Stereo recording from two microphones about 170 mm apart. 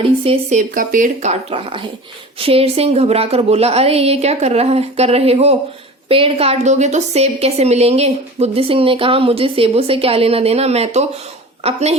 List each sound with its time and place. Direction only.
0.0 s a woman's voice: 35° right (ahead or behind)
0.7 s a woman's voice: 55° right (ahead or behind)